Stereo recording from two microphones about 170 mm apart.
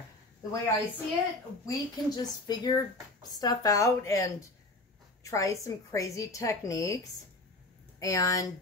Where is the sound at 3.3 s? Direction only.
20° left (ahead or behind).